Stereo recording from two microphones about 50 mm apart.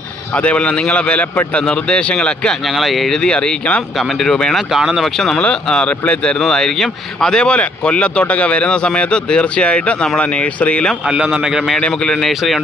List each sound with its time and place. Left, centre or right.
0.3 s speech: left
2.6 s speech: centre
3.2 s speech: centre
4.0 s speech: centre
4.7 s a man's voice: centre
5.0 s speech: centre
5.4 s speech: centre
6.5 s speech: centre; by 10.9 s left
11.1 s a man's voice: centre
11.8 s speech: centre
12.2 s speech: centre